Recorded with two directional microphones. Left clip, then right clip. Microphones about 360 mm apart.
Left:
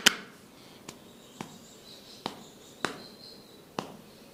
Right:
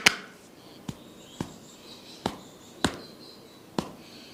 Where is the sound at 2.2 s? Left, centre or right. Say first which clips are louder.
Right 5 dB; right.